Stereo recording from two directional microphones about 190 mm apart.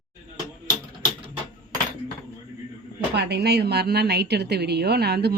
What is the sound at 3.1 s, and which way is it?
A woman's voice, 60° right (ahead or behind).